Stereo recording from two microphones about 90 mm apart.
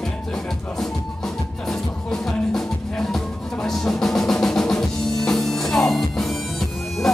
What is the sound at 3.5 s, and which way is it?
Drum, 5° left (ahead or behind).